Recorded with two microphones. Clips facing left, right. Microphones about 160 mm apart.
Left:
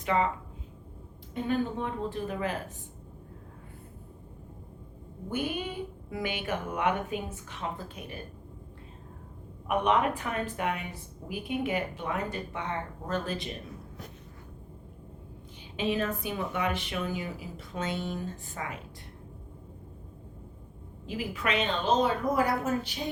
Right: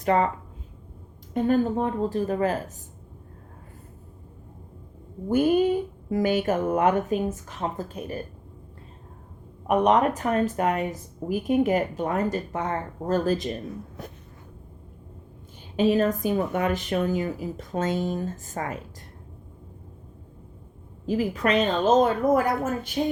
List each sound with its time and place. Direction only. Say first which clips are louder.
0.0 s speech: right 5 dB; 45° right (ahead or behind)
1.3 s speech: right 7 dB; 45° right (ahead or behind)
5.3 s speech: right 13 dB; 40° right (ahead or behind)
9.6 s speech: right 6 dB; 40° right (ahead or behind)
15.7 s speech: right 8 dB; 40° right (ahead or behind)
21.1 s speech: right 8 dB; 40° right (ahead or behind)